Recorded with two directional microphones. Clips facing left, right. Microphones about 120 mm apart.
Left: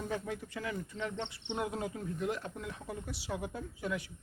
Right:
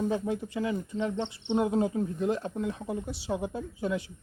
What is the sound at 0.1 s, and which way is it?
Speech, 25° right (ahead or behind).